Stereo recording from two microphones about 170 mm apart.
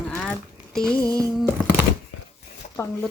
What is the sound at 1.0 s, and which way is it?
Music, 20° right (ahead or behind).